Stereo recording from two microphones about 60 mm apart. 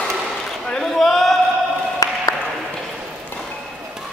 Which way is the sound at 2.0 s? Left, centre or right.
Left.